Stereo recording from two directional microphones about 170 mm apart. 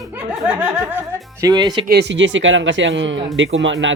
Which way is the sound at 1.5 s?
25° right (ahead or behind).